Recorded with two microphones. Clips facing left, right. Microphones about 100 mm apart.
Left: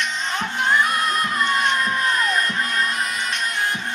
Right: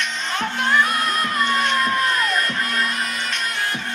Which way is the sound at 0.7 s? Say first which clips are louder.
Even; 25° left (ahead or behind).